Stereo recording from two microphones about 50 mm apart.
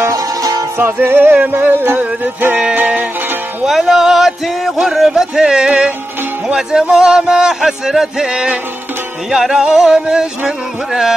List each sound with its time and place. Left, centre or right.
0.7 s music: right
3.6 s speech: centre